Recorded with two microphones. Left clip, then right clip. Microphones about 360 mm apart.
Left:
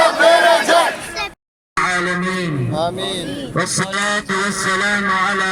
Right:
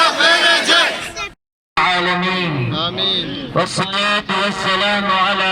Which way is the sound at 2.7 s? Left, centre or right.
Left.